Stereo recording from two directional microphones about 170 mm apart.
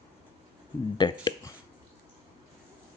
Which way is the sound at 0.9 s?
25° left (ahead or behind).